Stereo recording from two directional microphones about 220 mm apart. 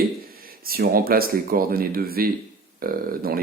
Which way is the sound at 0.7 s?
45° right (ahead or behind).